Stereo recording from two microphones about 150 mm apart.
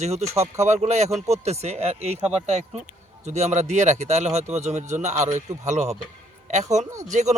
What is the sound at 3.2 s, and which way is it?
Speech, 50° right (ahead or behind).